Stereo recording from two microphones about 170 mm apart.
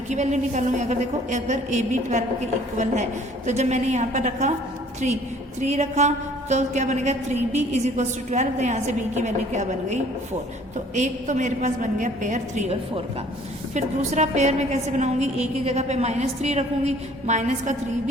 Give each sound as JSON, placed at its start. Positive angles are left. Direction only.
{"t": 0.1, "sound": "a woman's voice", "side_deg": -45}
{"t": 13.7, "sound": "a woman's voice", "side_deg": -45}